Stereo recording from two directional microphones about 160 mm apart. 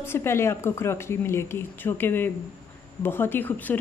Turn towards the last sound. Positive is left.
turn(degrees=10)  # may be behind; listen again after turning